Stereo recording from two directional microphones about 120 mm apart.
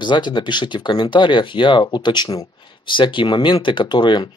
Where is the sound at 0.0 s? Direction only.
40° left (ahead or behind).